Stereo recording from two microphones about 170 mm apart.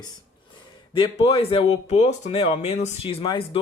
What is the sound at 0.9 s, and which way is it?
Speech, 30° left (ahead or behind).